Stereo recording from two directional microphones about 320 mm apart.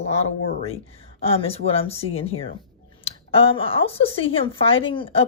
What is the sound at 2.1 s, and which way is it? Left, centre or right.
Speech, left.